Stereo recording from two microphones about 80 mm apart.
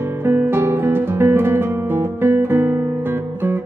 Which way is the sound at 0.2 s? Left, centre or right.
Right.